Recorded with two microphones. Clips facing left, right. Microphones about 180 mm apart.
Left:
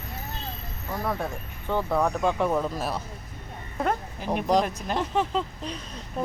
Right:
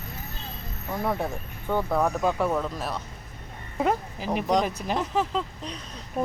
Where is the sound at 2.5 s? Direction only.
5° left (ahead or behind).